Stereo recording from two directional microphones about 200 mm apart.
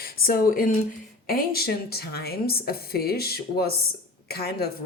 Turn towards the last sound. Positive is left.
turn(degrees=50)  # may be behind; listen again after turning